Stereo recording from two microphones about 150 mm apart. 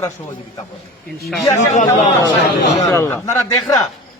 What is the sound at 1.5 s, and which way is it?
Speech, 50° left (ahead or behind).